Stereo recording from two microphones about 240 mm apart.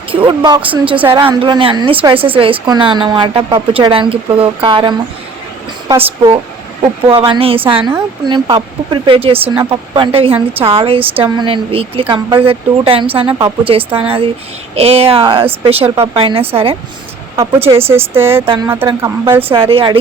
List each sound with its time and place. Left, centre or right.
0.1 s speech: right
17.3 s speech: centre
18.4 s speech: right
19.4 s speech: right